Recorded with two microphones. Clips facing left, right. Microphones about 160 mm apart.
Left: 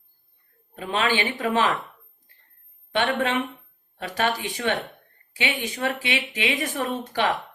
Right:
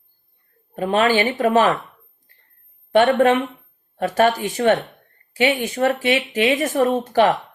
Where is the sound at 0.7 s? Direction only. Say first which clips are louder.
Right 7 dB; 45° right (ahead or behind).